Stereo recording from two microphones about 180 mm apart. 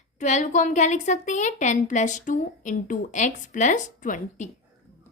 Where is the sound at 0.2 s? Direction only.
40° left (ahead or behind).